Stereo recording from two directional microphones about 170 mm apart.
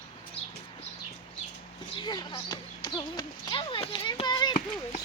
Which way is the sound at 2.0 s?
25° left (ahead or behind).